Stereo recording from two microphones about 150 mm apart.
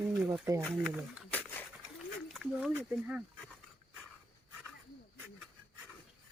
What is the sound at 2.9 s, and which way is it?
Speech, 10° right (ahead or behind).